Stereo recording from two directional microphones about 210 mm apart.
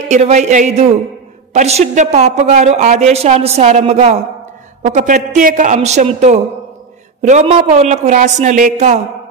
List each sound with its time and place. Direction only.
0.1 s a woman's voice: 35° right (ahead or behind)